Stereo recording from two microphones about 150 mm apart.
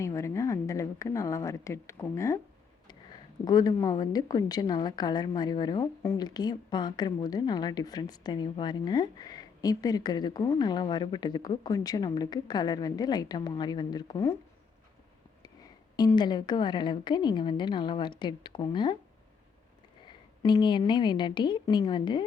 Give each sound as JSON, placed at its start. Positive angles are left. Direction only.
{"t": 0.0, "sound": "a woman's voice", "side_deg": 20}
{"t": 3.4, "sound": "a woman's voice", "side_deg": 25}
{"t": 16.0, "sound": "a woman's voice", "side_deg": 30}
{"t": 20.1, "sound": "a woman's voice", "side_deg": 30}